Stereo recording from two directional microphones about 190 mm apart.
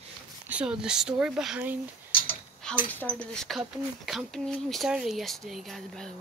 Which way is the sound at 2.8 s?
10° left (ahead or behind).